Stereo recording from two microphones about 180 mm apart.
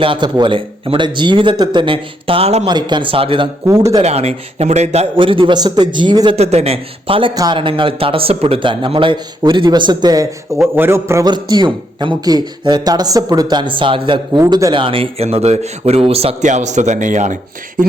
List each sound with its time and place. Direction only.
0.0 s a man's voice: 25° right (ahead or behind)
2.6 s a man's voice: 25° right (ahead or behind)
3.7 s speech: 15° right (ahead or behind)
4.0 s a man's voice: 35° right (ahead or behind)